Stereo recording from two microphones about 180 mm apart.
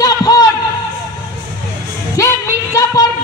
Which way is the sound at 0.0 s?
20° left (ahead or behind).